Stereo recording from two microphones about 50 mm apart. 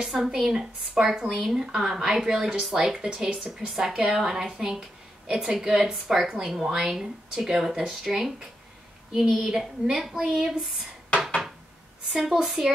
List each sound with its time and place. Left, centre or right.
0.0 s a woman's voice: centre
11.2 s a sound: centre
12.1 s a woman's voice: centre